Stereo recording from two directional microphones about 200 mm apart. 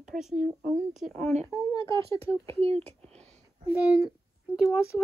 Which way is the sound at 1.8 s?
15° left (ahead or behind).